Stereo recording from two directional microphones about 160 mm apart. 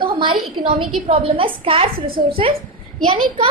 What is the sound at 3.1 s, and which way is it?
Speech, 35° right (ahead or behind).